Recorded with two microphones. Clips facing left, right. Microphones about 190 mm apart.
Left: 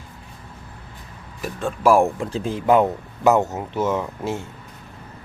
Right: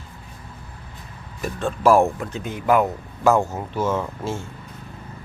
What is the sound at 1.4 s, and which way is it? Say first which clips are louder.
Speech: right 1 dB; 10° left (ahead or behind).